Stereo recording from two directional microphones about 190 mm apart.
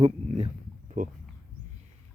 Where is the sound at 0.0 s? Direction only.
30° right (ahead or behind).